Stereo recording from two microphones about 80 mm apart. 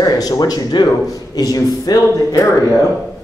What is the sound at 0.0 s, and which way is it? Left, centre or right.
Speech, left.